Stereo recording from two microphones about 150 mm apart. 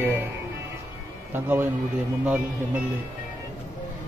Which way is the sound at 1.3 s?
15° right (ahead or behind).